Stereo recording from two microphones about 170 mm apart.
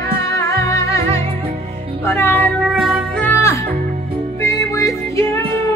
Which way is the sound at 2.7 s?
5° right (ahead or behind).